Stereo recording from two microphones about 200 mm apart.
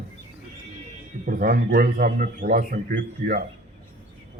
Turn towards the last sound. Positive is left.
turn(degrees=-45)  # may be behind; listen again after turning